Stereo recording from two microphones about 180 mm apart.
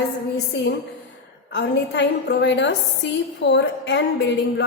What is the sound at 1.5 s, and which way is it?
A woman's voice, 75° left (ahead or behind).